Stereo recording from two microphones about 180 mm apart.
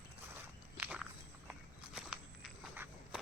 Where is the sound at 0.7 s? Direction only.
5° right (ahead or behind).